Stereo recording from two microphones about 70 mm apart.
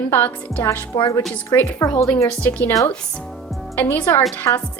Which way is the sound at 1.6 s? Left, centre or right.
Left.